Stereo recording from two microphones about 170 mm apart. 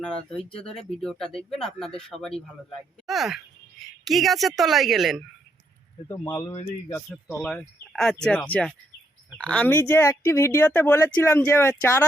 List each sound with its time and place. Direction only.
0.0 s speech: 5° left (ahead or behind)
6.1 s speech: 20° left (ahead or behind)
7.3 s speech: centre (ahead or behind)